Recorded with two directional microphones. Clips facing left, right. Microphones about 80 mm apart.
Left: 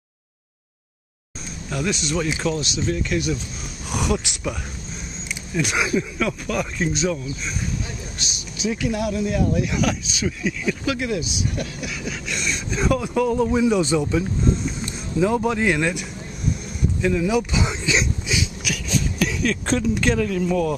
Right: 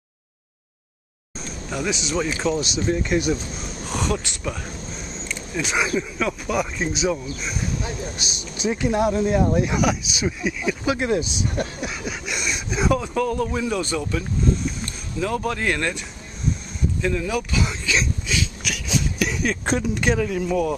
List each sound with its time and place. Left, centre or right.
1.7 s speech: centre
2.5 s speech: right
3.9 s speech: centre
8.2 s speech: centre
8.6 s speech: right
9.8 s speech: centre
10.9 s speech: right
12.0 s speech: centre
13.0 s speech: centre
17.0 s speech: centre
17.3 s speech: centre
18.9 s a sound: centre
19.3 s speech: centre